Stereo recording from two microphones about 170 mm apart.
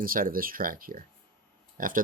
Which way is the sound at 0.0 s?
55° right (ahead or behind).